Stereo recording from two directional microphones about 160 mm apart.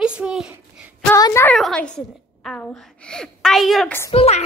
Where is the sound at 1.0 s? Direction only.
20° left (ahead or behind).